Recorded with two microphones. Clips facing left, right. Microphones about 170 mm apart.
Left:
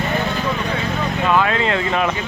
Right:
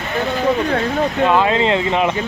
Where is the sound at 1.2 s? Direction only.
25° right (ahead or behind).